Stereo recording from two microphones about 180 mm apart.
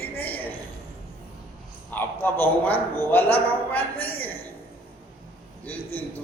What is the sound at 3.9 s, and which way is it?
Speech, 30° left (ahead or behind).